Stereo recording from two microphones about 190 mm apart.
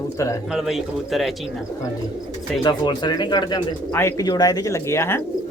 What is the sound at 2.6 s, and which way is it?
Speech, 20° left (ahead or behind).